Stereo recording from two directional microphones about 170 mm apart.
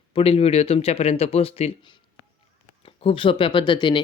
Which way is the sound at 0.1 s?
35° left (ahead or behind).